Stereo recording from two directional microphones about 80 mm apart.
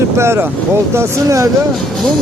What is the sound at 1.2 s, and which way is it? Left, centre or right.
Speech, right.